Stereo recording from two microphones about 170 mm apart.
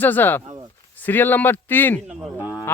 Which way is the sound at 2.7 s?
15° left (ahead or behind).